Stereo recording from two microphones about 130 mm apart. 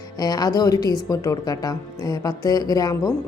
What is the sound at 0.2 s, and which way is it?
A woman's voice, 30° left (ahead or behind).